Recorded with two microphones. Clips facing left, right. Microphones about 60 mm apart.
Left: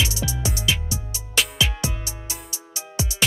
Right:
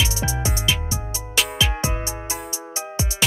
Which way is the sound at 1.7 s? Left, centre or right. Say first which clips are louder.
Right 4 dB; right.